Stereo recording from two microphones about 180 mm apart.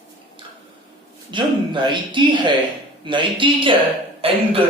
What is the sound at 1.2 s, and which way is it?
Speech, 25° right (ahead or behind).